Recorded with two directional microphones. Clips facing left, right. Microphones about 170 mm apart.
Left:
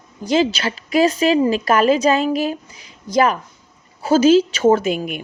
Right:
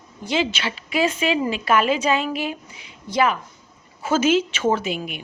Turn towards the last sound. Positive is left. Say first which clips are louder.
# left 6 dB
turn(degrees=45)  # may be behind; listen again after turning